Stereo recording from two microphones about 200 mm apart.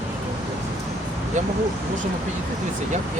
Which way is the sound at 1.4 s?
35° right (ahead or behind).